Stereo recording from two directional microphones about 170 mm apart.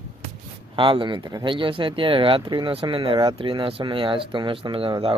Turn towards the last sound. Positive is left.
turn(degrees=-30)  # may be behind; listen again after turning